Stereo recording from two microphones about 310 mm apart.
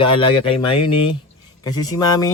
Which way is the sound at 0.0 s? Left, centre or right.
Centre.